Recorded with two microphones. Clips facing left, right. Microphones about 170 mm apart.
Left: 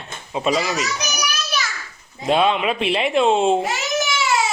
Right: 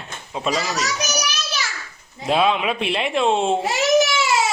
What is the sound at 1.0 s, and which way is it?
Speech, 45° right (ahead or behind).